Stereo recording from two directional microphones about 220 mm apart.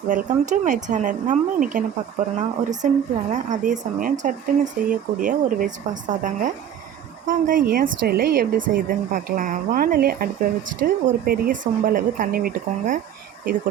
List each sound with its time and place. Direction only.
0.1 s speech: 35° right (ahead or behind)